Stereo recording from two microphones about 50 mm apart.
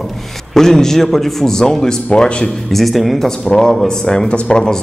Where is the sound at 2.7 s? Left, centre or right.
Centre.